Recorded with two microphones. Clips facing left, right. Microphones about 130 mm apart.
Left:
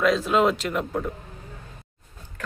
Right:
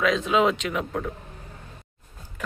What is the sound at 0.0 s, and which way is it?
Speech, centre (ahead or behind).